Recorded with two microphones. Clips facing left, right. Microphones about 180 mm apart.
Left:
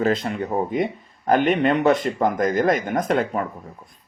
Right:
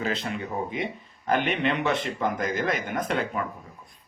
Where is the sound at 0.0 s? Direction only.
45° left (ahead or behind).